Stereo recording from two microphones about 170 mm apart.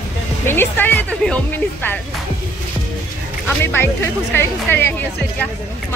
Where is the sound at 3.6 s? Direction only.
15° left (ahead or behind).